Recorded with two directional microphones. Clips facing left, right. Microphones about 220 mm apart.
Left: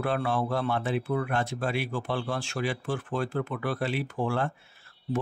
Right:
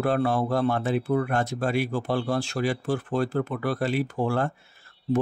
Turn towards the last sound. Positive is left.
turn(degrees=-40)  # may be behind; listen again after turning